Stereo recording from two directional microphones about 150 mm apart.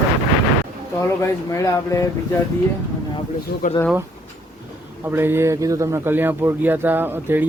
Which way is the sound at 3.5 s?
90° left.